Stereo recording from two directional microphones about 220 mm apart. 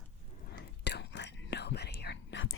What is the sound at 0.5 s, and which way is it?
Whispering, 50° left (ahead or behind).